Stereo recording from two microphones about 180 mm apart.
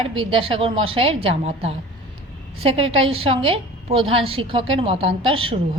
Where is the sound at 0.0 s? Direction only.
30° right (ahead or behind).